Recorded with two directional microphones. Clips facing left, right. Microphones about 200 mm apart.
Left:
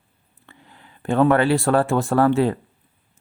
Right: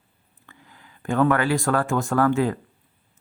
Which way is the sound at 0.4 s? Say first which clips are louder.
Left 2 dB; 25° left (ahead or behind).